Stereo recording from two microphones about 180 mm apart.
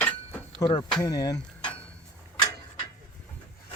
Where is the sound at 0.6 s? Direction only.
20° left (ahead or behind).